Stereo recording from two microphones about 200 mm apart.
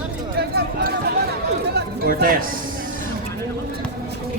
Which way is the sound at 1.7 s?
45° right (ahead or behind).